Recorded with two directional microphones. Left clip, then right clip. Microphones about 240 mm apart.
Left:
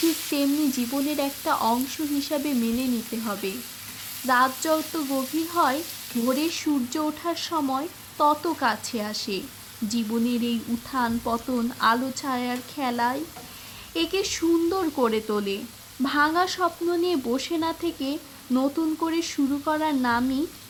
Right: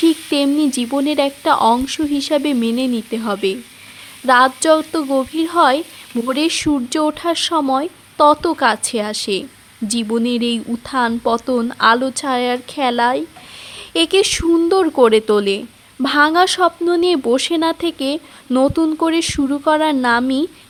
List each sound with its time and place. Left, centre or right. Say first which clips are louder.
0.3 s speech: right 8 dB; right